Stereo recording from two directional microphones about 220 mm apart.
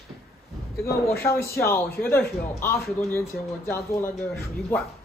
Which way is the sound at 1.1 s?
10° left (ahead or behind).